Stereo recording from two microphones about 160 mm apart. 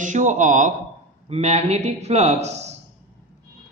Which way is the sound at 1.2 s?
40° right (ahead or behind).